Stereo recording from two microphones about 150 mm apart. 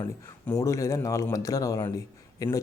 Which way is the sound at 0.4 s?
20° left (ahead or behind).